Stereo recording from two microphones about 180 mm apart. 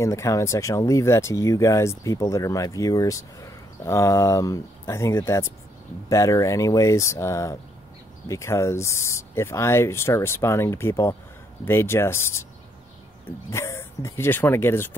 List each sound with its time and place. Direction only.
0.0 s speech: 15° left (ahead or behind)
13.5 s speech: 15° left (ahead or behind)